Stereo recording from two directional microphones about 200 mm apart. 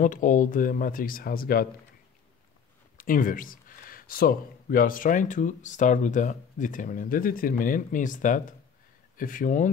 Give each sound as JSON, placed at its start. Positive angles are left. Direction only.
{"t": 0.0, "sound": "speech", "side_deg": 40}
{"t": 3.0, "sound": "speech", "side_deg": 45}